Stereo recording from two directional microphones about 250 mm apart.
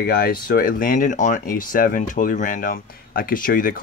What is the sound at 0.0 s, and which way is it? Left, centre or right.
Speech, left.